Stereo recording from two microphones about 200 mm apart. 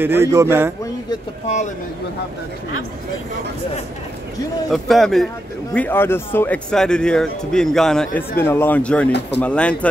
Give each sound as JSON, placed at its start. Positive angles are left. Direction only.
{"t": 0.0, "sound": "a man's voice", "side_deg": -10}
{"t": 4.6, "sound": "a man's voice", "side_deg": 0}